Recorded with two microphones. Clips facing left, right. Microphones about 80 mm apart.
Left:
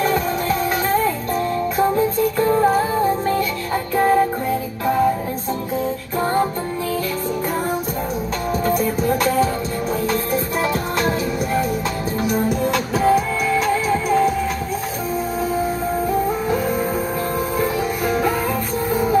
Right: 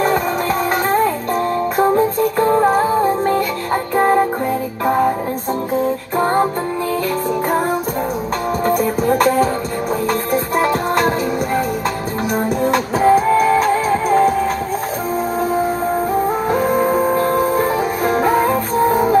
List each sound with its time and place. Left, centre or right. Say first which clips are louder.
0.0 s music: right 3 dB; right
6.1 s music: right 3 dB; right
8.6 s music: right 3 dB; right
12.7 s music: right 5 dB; right
16.4 s music: right 5 dB; right